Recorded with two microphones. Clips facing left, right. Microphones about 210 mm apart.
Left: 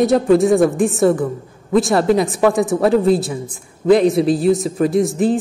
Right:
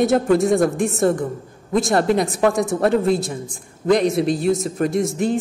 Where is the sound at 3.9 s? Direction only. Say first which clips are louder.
Left 4 dB; centre (ahead or behind).